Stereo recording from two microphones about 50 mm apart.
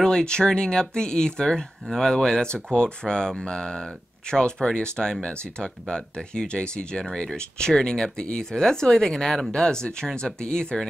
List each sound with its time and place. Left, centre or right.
0.0 s speech: centre